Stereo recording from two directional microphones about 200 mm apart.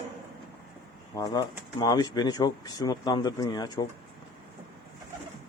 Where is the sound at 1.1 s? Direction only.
20° left (ahead or behind).